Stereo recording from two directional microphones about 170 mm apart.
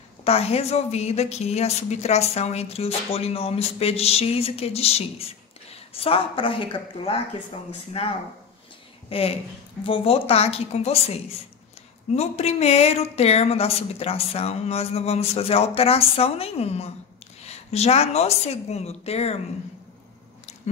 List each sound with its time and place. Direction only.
0.2 s a woman's voice: 35° left (ahead or behind)